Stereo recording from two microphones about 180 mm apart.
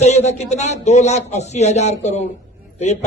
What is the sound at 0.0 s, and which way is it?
A man's voice, 40° left (ahead or behind).